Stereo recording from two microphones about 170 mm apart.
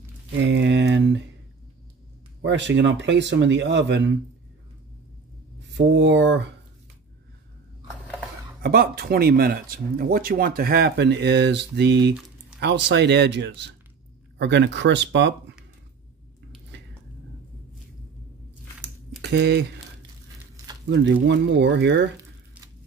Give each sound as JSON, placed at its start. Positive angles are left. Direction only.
{"t": 0.4, "sound": "a sound", "side_deg": -90}
{"t": 2.4, "sound": "speech", "side_deg": -90}
{"t": 5.7, "sound": "speech", "side_deg": -90}
{"t": 8.6, "sound": "speech", "side_deg": -65}
{"t": 19.2, "sound": "speech", "side_deg": -80}
{"t": 20.9, "sound": "speech", "side_deg": -90}